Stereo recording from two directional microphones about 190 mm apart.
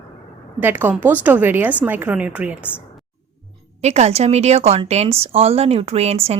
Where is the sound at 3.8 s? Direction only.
35° right (ahead or behind).